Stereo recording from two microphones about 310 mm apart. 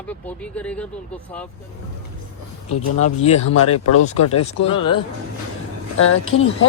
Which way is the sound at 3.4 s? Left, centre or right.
Left.